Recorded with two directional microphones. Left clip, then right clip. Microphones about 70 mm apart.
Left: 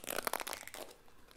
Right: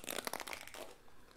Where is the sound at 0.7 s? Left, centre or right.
Left.